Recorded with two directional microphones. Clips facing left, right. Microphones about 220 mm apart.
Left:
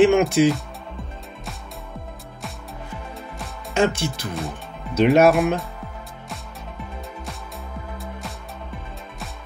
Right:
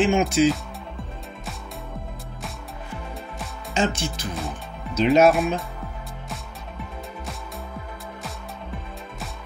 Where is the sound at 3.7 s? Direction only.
60° left (ahead or behind).